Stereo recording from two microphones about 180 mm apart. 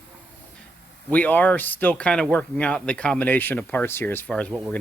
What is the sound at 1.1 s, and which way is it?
Speech, 10° left (ahead or behind).